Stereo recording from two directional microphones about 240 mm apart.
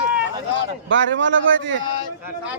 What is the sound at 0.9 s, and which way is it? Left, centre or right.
Speech, right.